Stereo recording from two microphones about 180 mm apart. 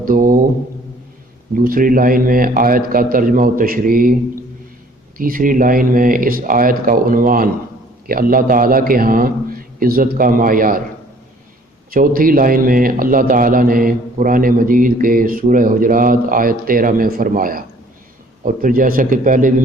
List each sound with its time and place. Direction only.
0.0 s mantra: 50° right (ahead or behind)
1.5 s a man's voice: 50° right (ahead or behind)
5.1 s a man's voice: 50° right (ahead or behind)
11.9 s a man's voice: 50° right (ahead or behind)